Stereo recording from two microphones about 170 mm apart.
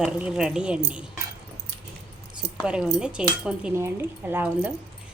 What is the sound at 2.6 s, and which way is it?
Speech, 5° right (ahead or behind).